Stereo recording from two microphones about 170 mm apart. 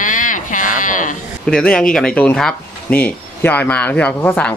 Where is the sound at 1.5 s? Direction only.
5° left (ahead or behind).